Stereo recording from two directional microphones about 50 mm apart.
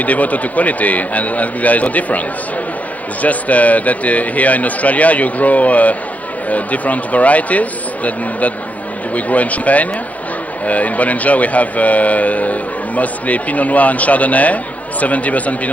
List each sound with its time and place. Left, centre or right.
0.0 s a man's voice: left